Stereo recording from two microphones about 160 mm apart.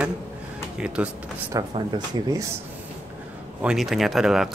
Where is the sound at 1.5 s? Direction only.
25° right (ahead or behind).